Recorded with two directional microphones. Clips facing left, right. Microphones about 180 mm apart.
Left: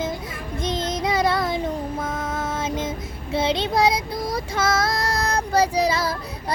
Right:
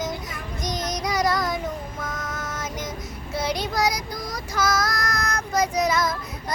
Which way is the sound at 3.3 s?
25° left (ahead or behind).